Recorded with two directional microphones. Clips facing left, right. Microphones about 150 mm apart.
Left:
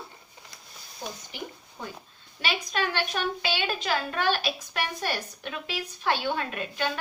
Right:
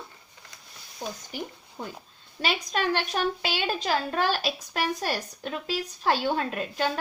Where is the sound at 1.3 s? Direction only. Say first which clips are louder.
Right 4 dB; 45° right (ahead or behind).